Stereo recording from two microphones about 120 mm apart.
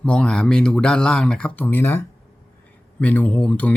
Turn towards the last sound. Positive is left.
turn(degrees=10)  # may be behind; listen again after turning